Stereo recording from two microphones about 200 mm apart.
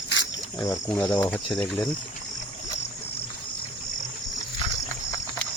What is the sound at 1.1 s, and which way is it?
Speech, 5° left (ahead or behind).